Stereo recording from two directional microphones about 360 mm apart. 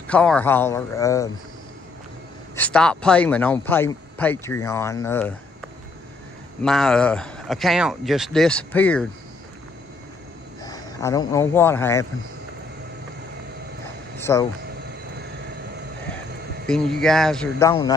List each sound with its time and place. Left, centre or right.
0.0 s speech: centre
2.5 s speech: centre
6.6 s speech: centre
10.6 s speech: centre
14.1 s a sound: centre
16.6 s speech: centre